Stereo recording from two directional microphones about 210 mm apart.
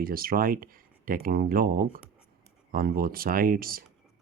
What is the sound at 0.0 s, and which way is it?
Speech, 45° right (ahead or behind).